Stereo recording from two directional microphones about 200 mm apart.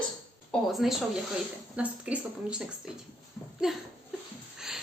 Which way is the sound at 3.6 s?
Centre (ahead or behind).